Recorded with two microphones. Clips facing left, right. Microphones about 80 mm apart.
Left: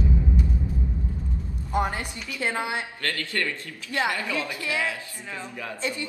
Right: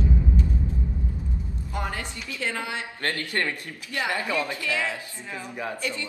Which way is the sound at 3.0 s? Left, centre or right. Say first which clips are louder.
Right 1 dB; right.